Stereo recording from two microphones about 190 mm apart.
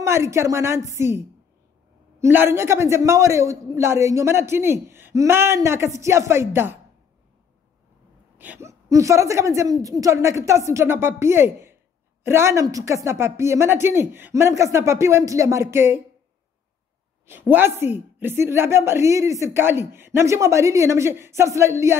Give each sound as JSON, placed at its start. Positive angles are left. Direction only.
{"t": 0.0, "sound": "a woman's voice", "side_deg": -15}
{"t": 8.4, "sound": "a woman's voice", "side_deg": -10}
{"t": 17.3, "sound": "a woman's voice", "side_deg": -10}